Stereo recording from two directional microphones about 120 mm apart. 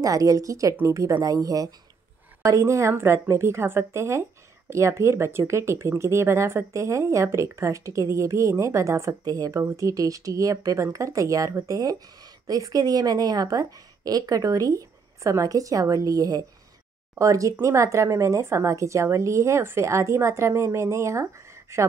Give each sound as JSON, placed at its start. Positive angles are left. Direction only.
{"t": 0.0, "sound": "speech", "side_deg": -30}